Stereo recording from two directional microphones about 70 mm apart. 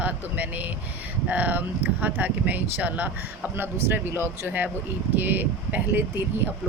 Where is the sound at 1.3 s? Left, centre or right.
Right.